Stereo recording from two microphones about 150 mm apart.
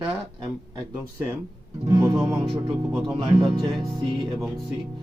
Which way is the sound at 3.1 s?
30° right (ahead or behind).